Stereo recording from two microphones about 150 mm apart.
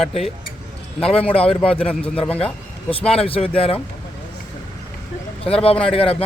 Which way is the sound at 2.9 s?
40° left (ahead or behind).